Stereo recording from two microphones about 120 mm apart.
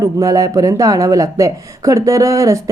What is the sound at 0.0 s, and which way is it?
A woman's voice, 30° right (ahead or behind).